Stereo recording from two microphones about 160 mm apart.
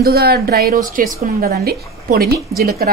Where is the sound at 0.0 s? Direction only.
75° right (ahead or behind).